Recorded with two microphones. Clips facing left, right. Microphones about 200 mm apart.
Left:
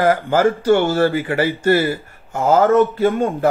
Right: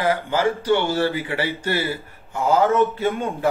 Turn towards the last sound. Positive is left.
turn(degrees=50)  # may be behind; listen again after turning